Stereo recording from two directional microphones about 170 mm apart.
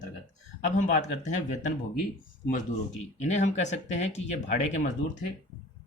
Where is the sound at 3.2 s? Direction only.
40° left (ahead or behind).